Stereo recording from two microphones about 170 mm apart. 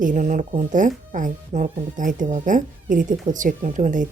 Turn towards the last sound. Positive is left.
turn(degrees=-50)  # may be behind; listen again after turning